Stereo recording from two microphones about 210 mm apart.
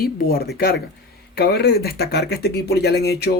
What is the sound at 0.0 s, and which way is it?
Speech, 45° left (ahead or behind).